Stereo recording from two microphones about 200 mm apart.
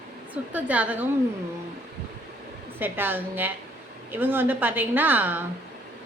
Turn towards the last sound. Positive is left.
turn(degrees=-10)  # may be behind; listen again after turning